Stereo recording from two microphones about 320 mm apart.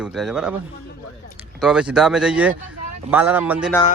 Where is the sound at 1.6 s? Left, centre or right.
Centre.